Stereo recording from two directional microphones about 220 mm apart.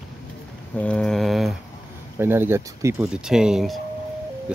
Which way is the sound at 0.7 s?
5° left (ahead or behind).